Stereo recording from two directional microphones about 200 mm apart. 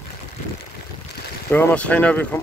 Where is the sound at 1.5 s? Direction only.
10° left (ahead or behind).